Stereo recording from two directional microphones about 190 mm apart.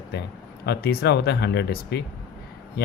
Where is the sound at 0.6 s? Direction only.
60° left (ahead or behind).